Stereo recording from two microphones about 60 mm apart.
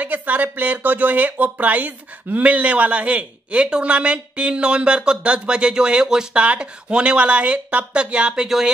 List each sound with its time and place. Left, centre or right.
0.0 s speech: right; by 8.6 s centre